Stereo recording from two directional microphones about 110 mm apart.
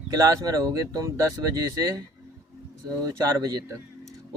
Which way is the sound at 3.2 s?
35° right (ahead or behind).